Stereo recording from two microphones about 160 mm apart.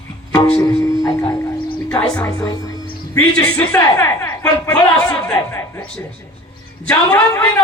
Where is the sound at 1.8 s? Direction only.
5° left (ahead or behind).